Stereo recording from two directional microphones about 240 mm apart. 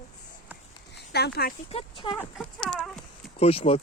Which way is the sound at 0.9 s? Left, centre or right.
Left.